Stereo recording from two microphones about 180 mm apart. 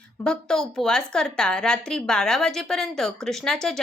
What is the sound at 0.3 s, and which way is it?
A woman's voice, 5° left (ahead or behind).